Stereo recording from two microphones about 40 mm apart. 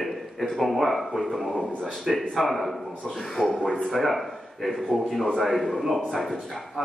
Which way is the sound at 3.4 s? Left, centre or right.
Centre.